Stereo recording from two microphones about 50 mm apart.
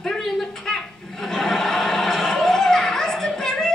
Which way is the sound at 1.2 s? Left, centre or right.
Centre.